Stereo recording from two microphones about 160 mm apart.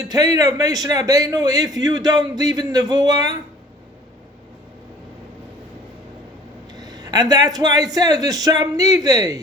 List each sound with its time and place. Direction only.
0.0 s a man's voice: 20° right (ahead or behind)
6.7 s a man's voice: 25° right (ahead or behind)